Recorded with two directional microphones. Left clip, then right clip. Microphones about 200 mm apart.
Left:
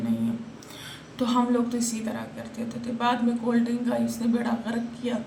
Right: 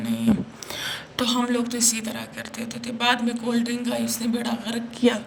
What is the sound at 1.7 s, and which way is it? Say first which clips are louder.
A man's voice: right 5 dB; 55° right (ahead or behind).